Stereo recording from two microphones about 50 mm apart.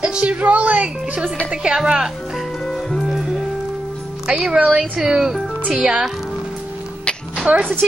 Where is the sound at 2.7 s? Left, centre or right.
Centre.